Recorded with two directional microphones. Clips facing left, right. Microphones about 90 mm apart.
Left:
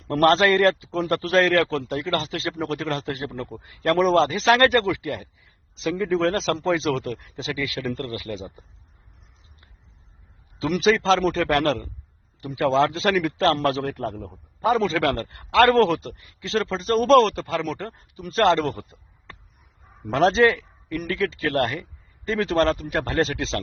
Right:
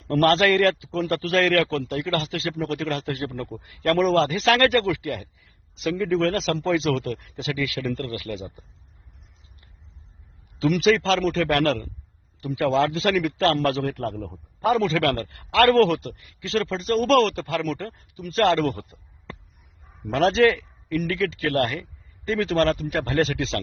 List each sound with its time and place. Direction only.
0.1 s a man's voice: 30° left (ahead or behind)
10.6 s a man's voice: 35° left (ahead or behind)
20.2 s a man's voice: 25° left (ahead or behind)